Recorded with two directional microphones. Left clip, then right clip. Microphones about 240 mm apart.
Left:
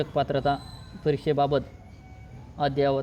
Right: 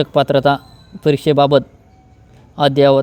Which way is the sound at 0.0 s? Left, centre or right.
Right.